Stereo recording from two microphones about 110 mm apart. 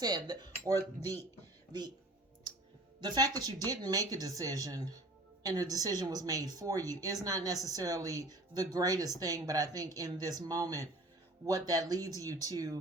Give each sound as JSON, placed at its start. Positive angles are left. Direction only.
{"t": 0.0, "sound": "speech", "side_deg": -35}
{"t": 3.0, "sound": "speech", "side_deg": -40}